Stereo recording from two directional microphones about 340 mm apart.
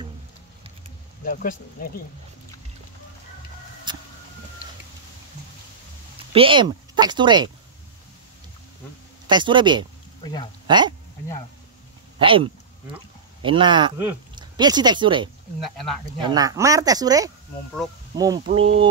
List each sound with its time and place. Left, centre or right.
1.2 s speech: left
3.9 s vehicle: centre
6.3 s speech: centre
9.3 s speech: centre
10.2 s speech: centre
10.7 s speech: centre
12.2 s speech: centre
15.6 s speech: centre
16.2 s speech: centre
18.1 s a sound: centre
18.5 s speech: centre